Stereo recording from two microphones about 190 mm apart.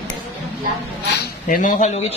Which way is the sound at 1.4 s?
45° left (ahead or behind).